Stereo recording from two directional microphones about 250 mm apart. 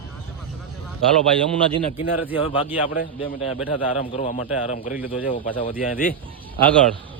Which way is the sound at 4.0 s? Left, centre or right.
Left.